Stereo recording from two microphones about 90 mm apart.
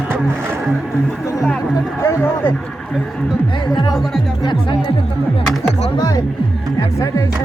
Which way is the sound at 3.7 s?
50° left (ahead or behind).